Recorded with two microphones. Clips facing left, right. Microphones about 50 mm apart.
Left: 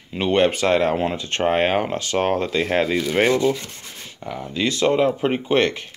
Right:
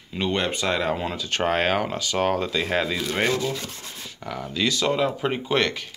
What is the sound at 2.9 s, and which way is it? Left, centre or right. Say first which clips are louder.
Rub: left 5 dB; centre.